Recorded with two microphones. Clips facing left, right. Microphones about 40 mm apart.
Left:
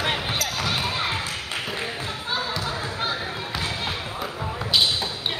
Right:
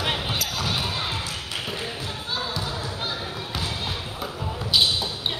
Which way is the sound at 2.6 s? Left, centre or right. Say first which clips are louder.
Left 2 dB; left.